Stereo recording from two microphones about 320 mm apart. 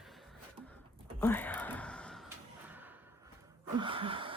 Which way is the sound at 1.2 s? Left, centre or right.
Centre.